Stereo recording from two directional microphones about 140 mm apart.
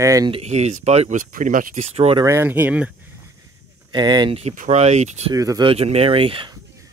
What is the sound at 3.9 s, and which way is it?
Speech, 30° right (ahead or behind).